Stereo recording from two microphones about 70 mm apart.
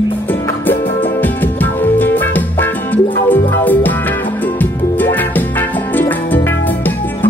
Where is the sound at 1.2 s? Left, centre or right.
Left.